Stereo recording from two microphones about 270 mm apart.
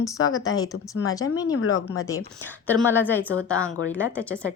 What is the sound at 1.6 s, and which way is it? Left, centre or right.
Speech, left.